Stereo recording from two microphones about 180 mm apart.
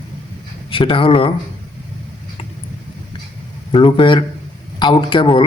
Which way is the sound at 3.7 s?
30° left (ahead or behind).